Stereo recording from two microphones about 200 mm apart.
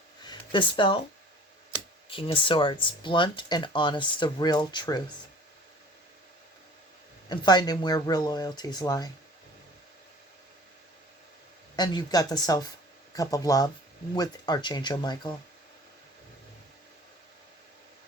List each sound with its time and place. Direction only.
0.3 s speech: 25° left (ahead or behind)
2.0 s speech: 25° left (ahead or behind)
7.3 s speech: 20° left (ahead or behind)
11.8 s speech: 20° left (ahead or behind)